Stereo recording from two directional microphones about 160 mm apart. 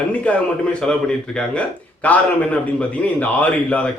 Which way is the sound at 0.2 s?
10° left (ahead or behind).